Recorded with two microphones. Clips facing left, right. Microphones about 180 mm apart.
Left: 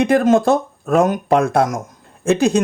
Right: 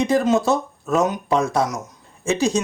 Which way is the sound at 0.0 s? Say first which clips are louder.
Left 4 dB; 55° left (ahead or behind).